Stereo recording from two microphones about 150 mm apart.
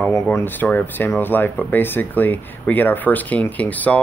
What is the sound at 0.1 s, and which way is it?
Speech, 15° left (ahead or behind).